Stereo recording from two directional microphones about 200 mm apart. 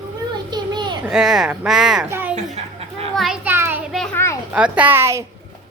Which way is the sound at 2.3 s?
35° right (ahead or behind).